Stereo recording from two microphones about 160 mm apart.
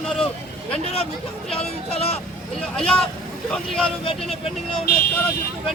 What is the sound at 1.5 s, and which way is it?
Speech, 40° left (ahead or behind).